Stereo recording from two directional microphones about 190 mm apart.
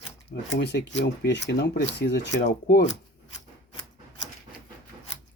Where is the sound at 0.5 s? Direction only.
65° left (ahead or behind).